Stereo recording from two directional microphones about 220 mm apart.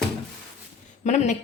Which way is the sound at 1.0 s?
30° left (ahead or behind).